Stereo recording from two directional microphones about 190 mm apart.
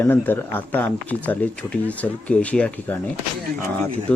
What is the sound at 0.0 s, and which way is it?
Speech, 10° left (ahead or behind).